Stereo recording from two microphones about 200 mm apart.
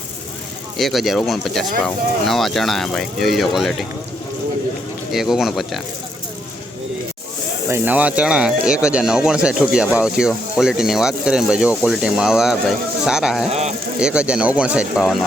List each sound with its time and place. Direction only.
0.8 s speech: centre (ahead or behind)
5.1 s speech: centre (ahead or behind)
7.7 s speech: 10° right (ahead or behind)
13.5 s speech: 35° right (ahead or behind)
14.0 s speech: 5° right (ahead or behind)